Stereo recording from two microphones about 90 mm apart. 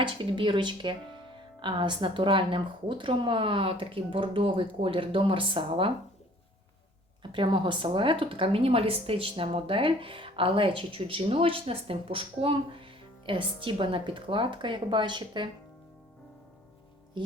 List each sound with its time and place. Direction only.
0.0 s a woman's voice: 70° right (ahead or behind)
7.2 s a woman's voice: 65° right (ahead or behind)